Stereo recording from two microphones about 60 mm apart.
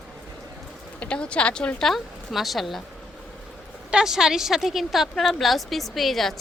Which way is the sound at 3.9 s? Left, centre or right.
Centre.